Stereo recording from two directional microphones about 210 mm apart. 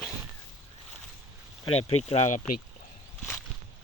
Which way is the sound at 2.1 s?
30° left (ahead or behind).